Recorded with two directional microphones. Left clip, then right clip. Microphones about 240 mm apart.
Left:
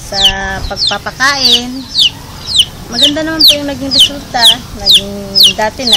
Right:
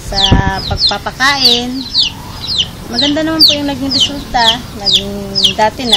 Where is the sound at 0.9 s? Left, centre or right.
Centre.